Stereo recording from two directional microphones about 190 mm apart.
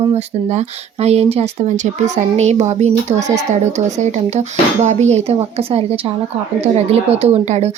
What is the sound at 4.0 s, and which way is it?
Speech, 35° right (ahead or behind).